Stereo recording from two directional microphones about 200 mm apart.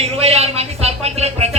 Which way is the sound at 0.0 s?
30° right (ahead or behind).